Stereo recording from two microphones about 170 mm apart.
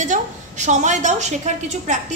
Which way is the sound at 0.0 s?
45° right (ahead or behind).